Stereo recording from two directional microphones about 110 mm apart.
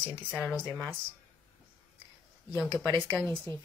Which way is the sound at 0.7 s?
15° left (ahead or behind).